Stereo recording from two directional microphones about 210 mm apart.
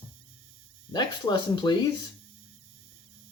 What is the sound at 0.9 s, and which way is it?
Speech, 20° left (ahead or behind).